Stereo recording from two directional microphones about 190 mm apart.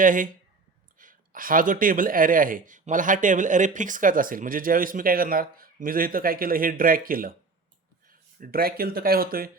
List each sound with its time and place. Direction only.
0.0 s speech: 45° right (ahead or behind)
8.4 s speech: 50° right (ahead or behind)